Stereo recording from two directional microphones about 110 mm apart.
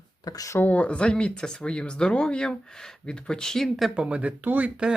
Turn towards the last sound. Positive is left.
turn(degrees=-10)  # may be behind; listen again after turning